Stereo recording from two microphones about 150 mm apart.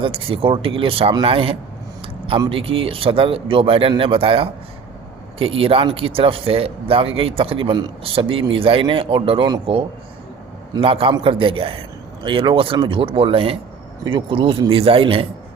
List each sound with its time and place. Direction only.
0.0 s speech: 35° right (ahead or behind)